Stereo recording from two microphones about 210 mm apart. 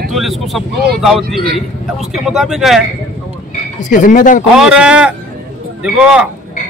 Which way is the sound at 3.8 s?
40° left (ahead or behind).